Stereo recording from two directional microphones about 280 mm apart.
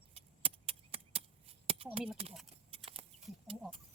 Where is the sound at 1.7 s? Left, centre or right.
Centre.